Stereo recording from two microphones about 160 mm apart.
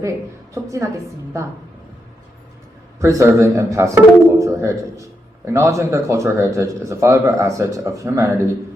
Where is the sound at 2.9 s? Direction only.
20° right (ahead or behind).